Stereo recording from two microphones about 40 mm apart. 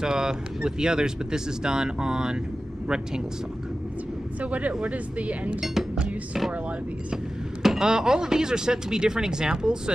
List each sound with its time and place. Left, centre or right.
0.0 s speech: centre
4.4 s speech: right
7.6 s speech: centre